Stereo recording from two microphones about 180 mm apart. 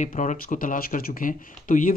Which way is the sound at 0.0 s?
40° left (ahead or behind).